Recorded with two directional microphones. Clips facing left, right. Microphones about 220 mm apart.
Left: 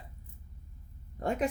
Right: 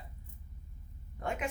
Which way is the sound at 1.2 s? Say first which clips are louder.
Left 6 dB; 35° left (ahead or behind).